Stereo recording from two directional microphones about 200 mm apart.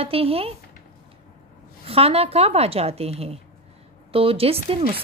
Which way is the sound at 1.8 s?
30° right (ahead or behind).